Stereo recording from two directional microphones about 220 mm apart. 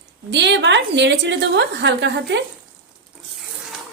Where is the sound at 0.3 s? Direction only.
50° right (ahead or behind).